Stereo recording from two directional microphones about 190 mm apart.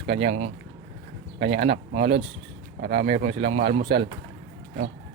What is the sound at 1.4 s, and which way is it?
Speech, 60° right (ahead or behind).